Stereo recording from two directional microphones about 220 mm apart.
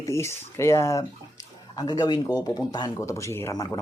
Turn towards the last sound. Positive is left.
turn(degrees=15)  # may be behind; listen again after turning